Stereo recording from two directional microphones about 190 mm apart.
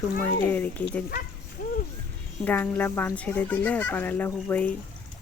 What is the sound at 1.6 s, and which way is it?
Music, 45° left (ahead or behind).